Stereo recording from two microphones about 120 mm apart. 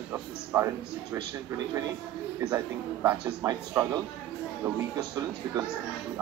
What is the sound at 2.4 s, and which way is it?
Speech, 30° right (ahead or behind).